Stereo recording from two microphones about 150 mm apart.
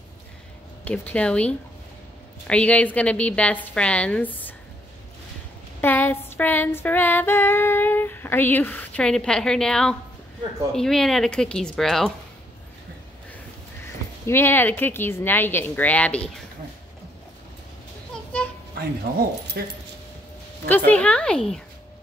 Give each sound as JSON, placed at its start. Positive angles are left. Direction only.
{"t": 0.8, "sound": "a woman's voice", "side_deg": 10}
{"t": 5.8, "sound": "female singing", "side_deg": 15}
{"t": 10.7, "sound": "speech", "side_deg": 5}
{"t": 14.2, "sound": "a woman's voice", "side_deg": 15}
{"t": 19.1, "sound": "speech", "side_deg": -90}
{"t": 20.6, "sound": "a woman's voice", "side_deg": 10}